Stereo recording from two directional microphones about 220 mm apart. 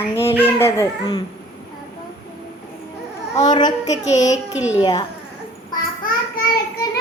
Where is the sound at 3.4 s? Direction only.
20° left (ahead or behind).